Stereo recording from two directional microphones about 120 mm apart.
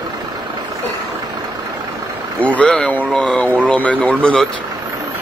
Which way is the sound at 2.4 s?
10° left (ahead or behind).